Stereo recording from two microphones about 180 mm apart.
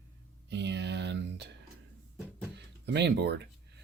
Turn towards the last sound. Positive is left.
turn(degrees=-65)  # may be behind; listen again after turning